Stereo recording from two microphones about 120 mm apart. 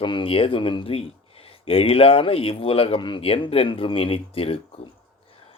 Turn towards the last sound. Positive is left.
turn(degrees=50)  # may be behind; listen again after turning